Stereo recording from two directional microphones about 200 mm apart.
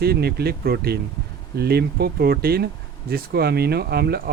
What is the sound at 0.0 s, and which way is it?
Speech, 50° right (ahead or behind).